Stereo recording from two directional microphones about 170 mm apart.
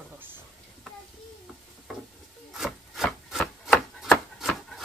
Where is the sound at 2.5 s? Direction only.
Centre (ahead or behind).